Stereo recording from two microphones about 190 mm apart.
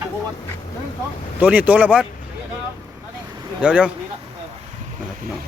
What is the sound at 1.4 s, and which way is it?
Speech, 5° right (ahead or behind).